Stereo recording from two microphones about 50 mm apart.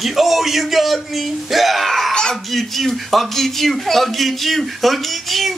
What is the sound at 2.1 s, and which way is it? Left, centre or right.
Speech, centre.